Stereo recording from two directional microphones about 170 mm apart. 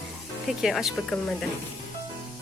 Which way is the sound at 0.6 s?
Centre (ahead or behind).